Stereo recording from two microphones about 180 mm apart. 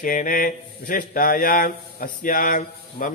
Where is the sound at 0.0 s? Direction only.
50° left (ahead or behind).